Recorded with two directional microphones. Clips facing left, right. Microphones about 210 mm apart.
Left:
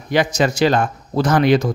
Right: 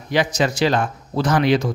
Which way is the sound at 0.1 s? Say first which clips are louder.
Left 2 dB; 50° left (ahead or behind).